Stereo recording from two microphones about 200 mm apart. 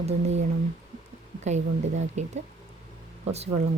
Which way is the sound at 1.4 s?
35° right (ahead or behind).